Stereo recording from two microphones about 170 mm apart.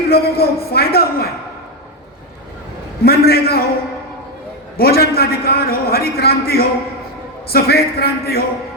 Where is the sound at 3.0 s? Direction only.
65° left (ahead or behind).